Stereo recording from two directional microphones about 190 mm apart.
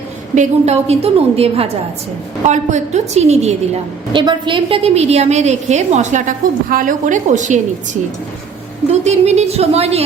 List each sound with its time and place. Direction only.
0.3 s a woman's voice: 35° right (ahead or behind)
4.1 s a woman's voice: 25° right (ahead or behind); by 7.6 s 40° right (ahead or behind)
8.9 s a woman's voice: 35° right (ahead or behind)